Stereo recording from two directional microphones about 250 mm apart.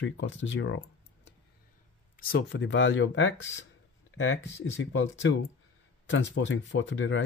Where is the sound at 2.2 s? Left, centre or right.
Left.